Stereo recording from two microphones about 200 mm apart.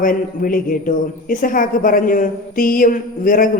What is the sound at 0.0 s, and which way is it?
A man's voice, 45° left (ahead or behind).